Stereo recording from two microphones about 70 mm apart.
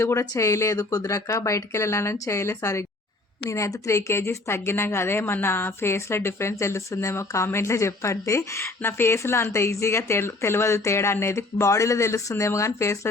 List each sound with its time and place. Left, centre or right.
0.0 s speech: left